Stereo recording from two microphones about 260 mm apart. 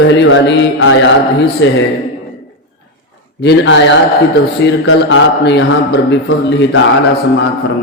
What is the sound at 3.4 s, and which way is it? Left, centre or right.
A man's voice, left.